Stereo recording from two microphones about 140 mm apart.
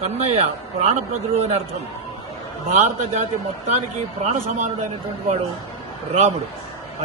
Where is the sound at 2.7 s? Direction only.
60° right (ahead or behind).